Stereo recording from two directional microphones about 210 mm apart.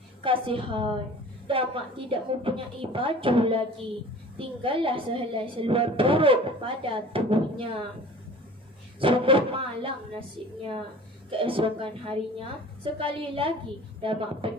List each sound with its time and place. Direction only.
0.2 s speech: 25° right (ahead or behind)
9.0 s speech: 25° right (ahead or behind)
11.3 s speech: 25° right (ahead or behind)